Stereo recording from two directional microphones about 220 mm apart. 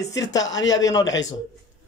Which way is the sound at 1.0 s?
55° left (ahead or behind).